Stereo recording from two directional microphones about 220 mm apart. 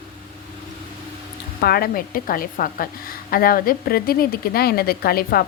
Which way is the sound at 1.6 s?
45° left (ahead or behind).